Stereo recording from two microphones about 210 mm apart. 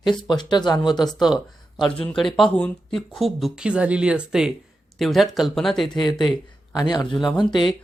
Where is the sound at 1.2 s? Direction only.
Centre (ahead or behind).